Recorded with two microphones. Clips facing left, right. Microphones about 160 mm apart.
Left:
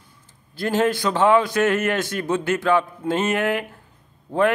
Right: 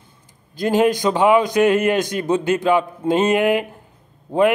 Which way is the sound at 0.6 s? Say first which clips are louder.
Right 4 dB; 15° right (ahead or behind).